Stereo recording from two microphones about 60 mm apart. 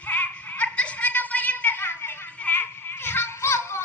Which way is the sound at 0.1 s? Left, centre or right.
Left.